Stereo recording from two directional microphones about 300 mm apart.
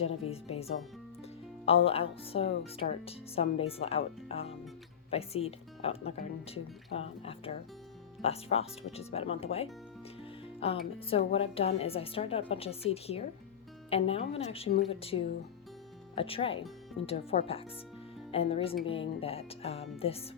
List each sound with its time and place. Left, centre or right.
0.0 s speech: centre